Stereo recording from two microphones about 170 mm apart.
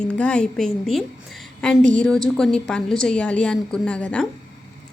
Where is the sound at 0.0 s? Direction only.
5° left (ahead or behind).